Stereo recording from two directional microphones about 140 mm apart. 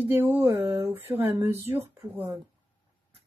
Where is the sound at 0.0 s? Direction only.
15° right (ahead or behind).